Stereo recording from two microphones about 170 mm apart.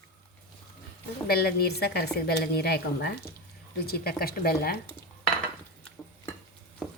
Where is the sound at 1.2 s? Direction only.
65° left (ahead or behind).